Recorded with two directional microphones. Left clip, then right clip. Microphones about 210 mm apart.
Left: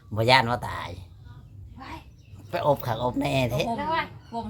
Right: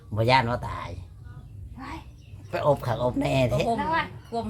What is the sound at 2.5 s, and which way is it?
Speech, 25° left (ahead or behind).